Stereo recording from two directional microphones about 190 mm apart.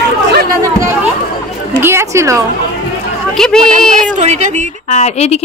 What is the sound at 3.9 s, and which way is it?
Speech, 40° right (ahead or behind).